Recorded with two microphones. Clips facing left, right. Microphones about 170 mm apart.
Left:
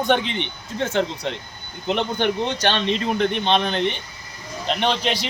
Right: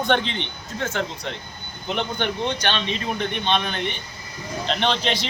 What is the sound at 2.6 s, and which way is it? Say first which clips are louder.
Speech: left 4 dB; 35° left (ahead or behind).